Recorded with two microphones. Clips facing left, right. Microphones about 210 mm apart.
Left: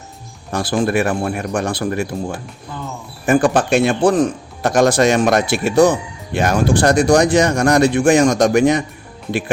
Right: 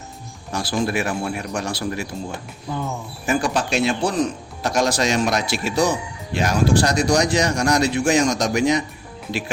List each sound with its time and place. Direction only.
0.5 s speech: 50° left (ahead or behind)
3.2 s speech: 55° left (ahead or behind)